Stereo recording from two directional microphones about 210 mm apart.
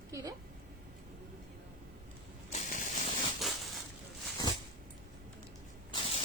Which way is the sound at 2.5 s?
35° left (ahead or behind).